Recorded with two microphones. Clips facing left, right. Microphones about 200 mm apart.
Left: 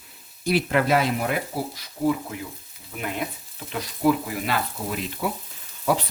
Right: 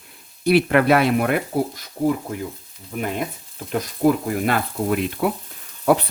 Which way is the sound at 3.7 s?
45° right (ahead or behind).